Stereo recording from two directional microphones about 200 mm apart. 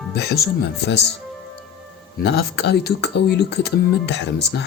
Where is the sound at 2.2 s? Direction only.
55° left (ahead or behind).